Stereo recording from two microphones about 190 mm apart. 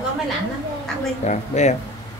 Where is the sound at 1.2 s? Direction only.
35° left (ahead or behind).